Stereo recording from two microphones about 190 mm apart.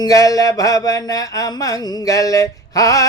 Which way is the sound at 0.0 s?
20° left (ahead or behind).